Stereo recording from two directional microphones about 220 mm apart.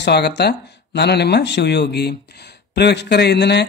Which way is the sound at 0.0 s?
50° left (ahead or behind).